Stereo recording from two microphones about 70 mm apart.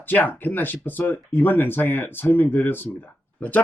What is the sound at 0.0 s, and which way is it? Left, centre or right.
Speech, left.